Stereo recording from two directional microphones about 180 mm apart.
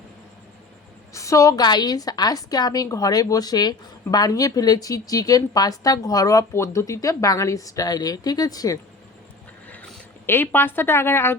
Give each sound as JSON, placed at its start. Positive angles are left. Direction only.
{"t": 1.1, "sound": "a woman's voice", "side_deg": 15}
{"t": 9.6, "sound": "speech", "side_deg": 10}